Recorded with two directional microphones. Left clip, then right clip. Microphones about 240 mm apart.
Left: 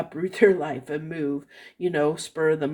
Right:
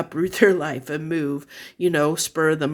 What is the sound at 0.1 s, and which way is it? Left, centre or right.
Speech, right.